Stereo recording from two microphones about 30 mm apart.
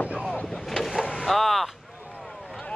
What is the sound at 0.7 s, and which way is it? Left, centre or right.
Vehicle, centre.